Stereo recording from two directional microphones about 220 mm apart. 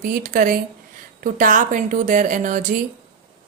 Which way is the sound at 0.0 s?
40° right (ahead or behind).